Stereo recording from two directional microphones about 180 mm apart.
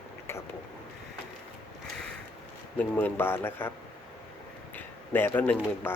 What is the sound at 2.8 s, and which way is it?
Speech, 10° left (ahead or behind).